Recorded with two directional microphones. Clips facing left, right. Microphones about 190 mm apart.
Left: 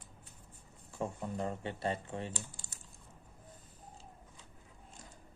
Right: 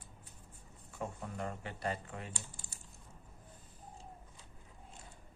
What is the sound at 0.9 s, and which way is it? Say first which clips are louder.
Speech: left 4 dB; 25° left (ahead or behind).